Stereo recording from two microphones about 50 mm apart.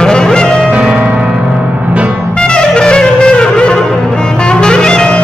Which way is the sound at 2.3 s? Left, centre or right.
Centre.